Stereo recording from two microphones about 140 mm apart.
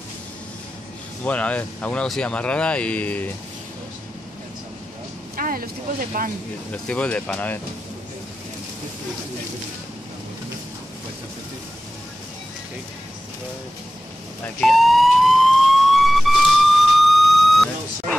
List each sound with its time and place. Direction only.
1.2 s speech: 10° left (ahead or behind)
5.3 s speech: 90° right
6.7 s speech: 10° left (ahead or behind)
14.4 s emergency vehicle: 5° left (ahead or behind)